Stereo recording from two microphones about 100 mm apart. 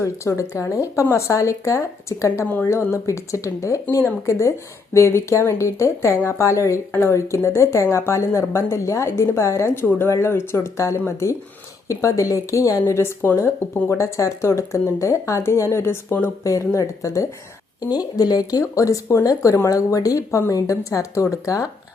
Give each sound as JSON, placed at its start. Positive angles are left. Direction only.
{"t": 0.0, "sound": "speech", "side_deg": 30}